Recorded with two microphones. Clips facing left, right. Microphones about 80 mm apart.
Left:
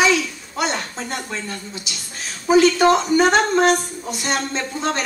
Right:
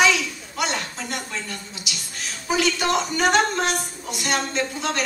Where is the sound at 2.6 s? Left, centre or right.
Left.